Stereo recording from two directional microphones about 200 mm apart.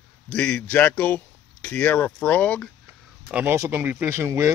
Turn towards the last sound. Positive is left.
turn(degrees=-15)  # may be behind; listen again after turning